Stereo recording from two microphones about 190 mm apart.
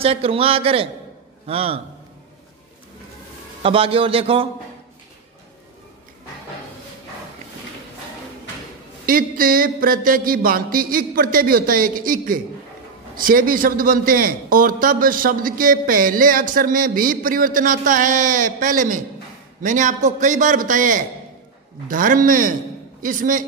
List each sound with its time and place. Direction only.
0.0 s a man's voice: 30° right (ahead or behind)
3.6 s speech: 30° right (ahead or behind)
9.0 s a man's voice: 50° right (ahead or behind)